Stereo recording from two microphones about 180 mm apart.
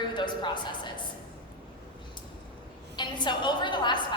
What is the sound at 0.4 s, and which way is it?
Speech, 25° left (ahead or behind).